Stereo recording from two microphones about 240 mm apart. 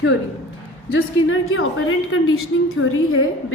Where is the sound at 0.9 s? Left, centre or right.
Left.